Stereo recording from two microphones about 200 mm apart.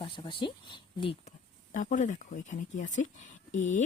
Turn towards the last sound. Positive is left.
turn(degrees=40)  # may be behind; listen again after turning